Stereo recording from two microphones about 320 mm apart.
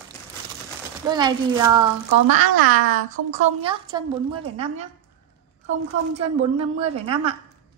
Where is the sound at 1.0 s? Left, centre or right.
Centre.